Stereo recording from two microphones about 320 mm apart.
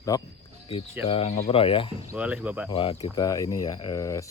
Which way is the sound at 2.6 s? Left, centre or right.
Centre.